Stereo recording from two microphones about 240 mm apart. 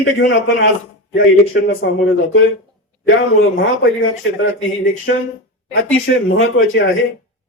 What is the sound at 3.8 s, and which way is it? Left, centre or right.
Speech, left.